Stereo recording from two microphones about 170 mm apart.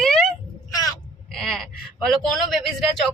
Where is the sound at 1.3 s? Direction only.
Centre (ahead or behind).